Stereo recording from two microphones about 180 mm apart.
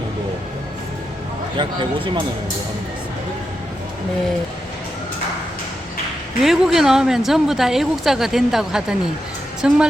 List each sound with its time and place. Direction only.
1.5 s speech: 25° right (ahead or behind)
6.4 s speech: centre (ahead or behind)